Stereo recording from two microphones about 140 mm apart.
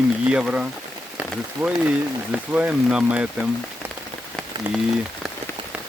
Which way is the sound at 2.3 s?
10° right (ahead or behind).